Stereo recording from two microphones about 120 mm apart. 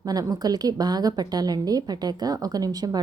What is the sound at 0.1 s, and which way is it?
A woman's voice, 30° right (ahead or behind).